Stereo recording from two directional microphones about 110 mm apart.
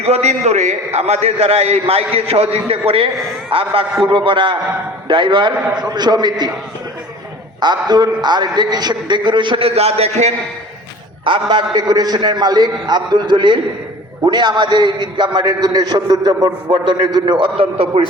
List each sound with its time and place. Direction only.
0.0 s a man's voice: 85° right; by 6.5 s 40° right (ahead or behind)
7.6 s a man's voice: 40° right (ahead or behind); by 10.3 s 80° right
11.3 s a man's voice: 45° right (ahead or behind); by 18.0 s 60° right (ahead or behind)